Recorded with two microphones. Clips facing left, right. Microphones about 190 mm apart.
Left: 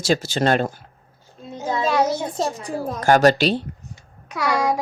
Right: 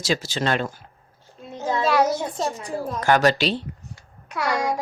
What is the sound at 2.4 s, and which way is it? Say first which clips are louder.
A woman's voice: left 2 dB; 35° left (ahead or behind).